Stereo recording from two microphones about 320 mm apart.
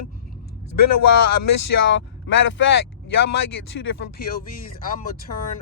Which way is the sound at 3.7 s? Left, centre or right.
Left.